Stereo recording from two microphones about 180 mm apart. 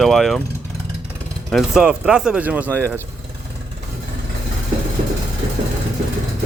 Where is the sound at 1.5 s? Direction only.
Centre (ahead or behind).